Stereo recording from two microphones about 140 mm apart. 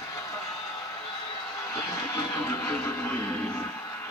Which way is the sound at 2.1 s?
20° left (ahead or behind).